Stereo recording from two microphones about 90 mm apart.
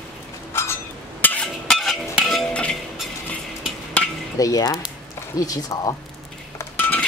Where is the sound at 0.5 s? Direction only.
25° left (ahead or behind).